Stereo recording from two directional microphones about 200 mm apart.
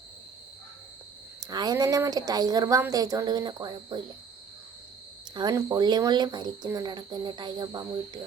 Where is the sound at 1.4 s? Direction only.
20° right (ahead or behind).